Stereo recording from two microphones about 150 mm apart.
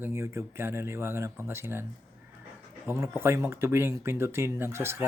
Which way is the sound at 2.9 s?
15° right (ahead or behind).